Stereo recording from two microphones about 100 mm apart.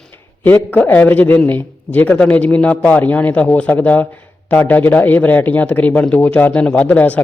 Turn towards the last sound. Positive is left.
turn(degrees=15)  # may be behind; listen again after turning